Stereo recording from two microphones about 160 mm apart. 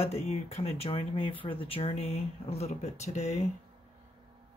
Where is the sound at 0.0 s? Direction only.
40° left (ahead or behind).